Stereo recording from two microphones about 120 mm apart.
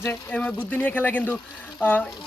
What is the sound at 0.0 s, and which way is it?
Speech, 20° left (ahead or behind).